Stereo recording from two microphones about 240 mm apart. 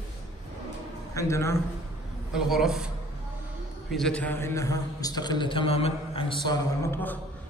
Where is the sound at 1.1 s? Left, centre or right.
Centre.